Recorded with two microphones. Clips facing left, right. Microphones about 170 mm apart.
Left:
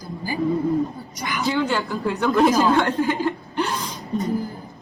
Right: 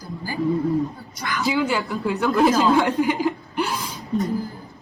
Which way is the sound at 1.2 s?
15° left (ahead or behind).